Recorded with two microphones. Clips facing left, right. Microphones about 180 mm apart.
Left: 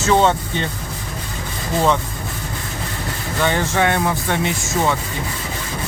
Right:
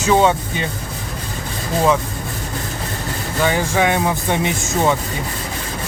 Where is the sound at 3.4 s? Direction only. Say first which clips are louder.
Right 1 dB; 10° right (ahead or behind).